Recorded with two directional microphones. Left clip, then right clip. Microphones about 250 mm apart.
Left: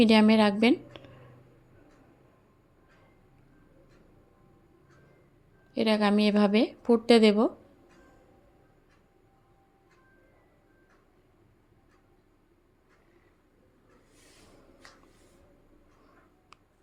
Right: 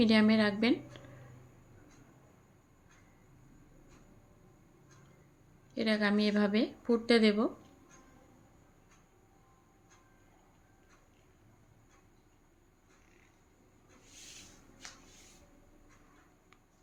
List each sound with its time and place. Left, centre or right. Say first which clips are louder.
0.0 s speech: left 6 dB; left
5.7 s speech: left 6 dB; left